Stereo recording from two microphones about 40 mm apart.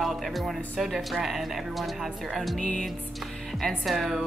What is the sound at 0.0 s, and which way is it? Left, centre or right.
A woman's voice, centre.